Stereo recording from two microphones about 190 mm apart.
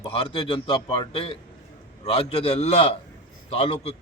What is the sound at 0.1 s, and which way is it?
A man's voice, 30° left (ahead or behind).